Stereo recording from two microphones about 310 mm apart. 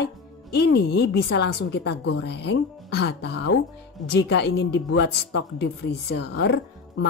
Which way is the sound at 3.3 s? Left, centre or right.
Left.